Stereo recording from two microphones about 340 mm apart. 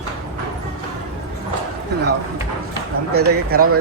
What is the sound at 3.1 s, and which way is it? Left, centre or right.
Speech, right.